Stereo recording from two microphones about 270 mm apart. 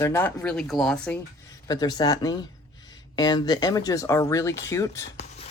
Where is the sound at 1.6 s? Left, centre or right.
Centre.